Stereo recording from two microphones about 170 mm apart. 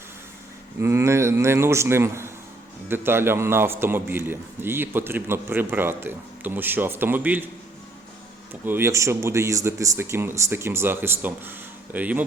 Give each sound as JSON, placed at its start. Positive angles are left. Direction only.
{"t": 0.8, "sound": "a man's voice", "side_deg": -15}
{"t": 8.6, "sound": "a man's voice", "side_deg": -15}